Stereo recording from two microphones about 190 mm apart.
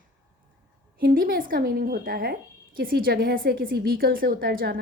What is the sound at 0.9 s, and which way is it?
A woman's voice, 50° right (ahead or behind).